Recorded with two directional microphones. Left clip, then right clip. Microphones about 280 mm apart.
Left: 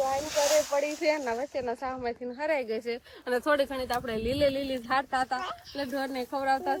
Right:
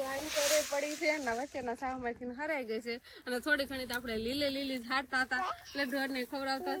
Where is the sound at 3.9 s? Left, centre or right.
Left.